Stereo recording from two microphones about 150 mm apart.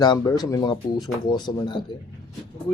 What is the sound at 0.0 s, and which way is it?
Speech, 25° left (ahead or behind).